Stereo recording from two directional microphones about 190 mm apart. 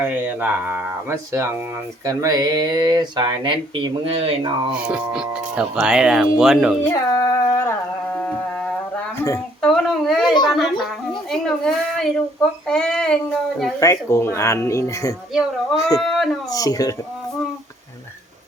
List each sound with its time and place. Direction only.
0.0 s speech: 10° right (ahead or behind); by 4.3 s 30° right (ahead or behind)
4.9 s speech: 5° right (ahead or behind)
6.9 s a sound: 15° left (ahead or behind); by 10.8 s centre (ahead or behind)
11.3 s speech: 5° left (ahead or behind)
13.7 s speech: 15° left (ahead or behind)
15.3 s speech: centre (ahead or behind)
16.5 s speech: 20° left (ahead or behind)